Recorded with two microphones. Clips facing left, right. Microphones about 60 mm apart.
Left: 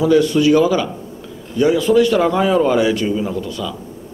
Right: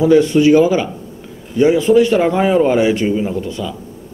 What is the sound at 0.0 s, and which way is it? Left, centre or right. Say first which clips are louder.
Speech: right 3 dB; right.